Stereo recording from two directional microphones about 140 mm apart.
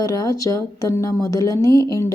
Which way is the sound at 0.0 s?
25° left (ahead or behind).